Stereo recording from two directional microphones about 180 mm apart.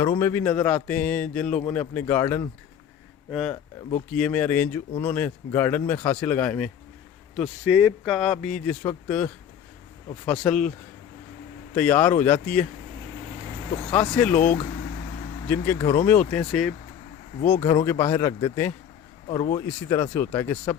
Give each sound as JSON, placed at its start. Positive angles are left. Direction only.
{"t": 0.0, "sound": "speech", "side_deg": 15}
{"t": 7.3, "sound": "speech", "side_deg": -5}
{"t": 10.4, "sound": "speech", "side_deg": 5}
{"t": 11.7, "sound": "speech", "side_deg": 10}
{"t": 13.8, "sound": "speech", "side_deg": 5}
{"t": 14.3, "sound": "speech", "side_deg": 50}
{"t": 15.4, "sound": "speech", "side_deg": 10}
{"t": 17.5, "sound": "speech", "side_deg": 20}